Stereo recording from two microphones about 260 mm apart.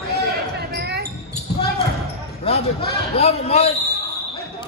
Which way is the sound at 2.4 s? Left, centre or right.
Left.